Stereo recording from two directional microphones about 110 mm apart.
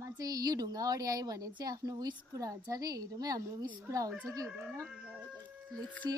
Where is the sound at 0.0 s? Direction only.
35° right (ahead or behind).